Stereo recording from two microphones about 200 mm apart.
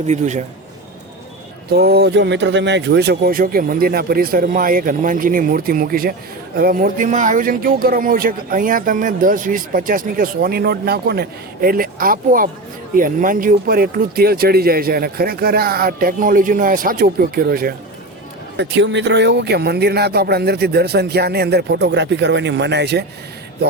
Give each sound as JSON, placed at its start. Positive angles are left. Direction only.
{"t": 0.1, "sound": "a man's voice", "side_deg": -35}
{"t": 1.7, "sound": "speech", "side_deg": -55}
{"t": 18.5, "sound": "speech", "side_deg": -60}